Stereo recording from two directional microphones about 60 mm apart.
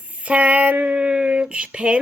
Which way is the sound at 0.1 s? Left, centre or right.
Right.